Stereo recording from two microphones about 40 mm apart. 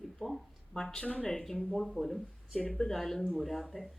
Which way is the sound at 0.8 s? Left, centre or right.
Centre.